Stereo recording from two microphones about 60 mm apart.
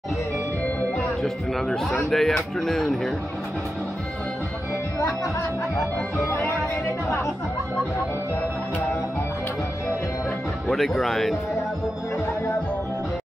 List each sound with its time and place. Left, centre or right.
0.9 s speech: centre
6.1 s speech: left
10.7 s speech: centre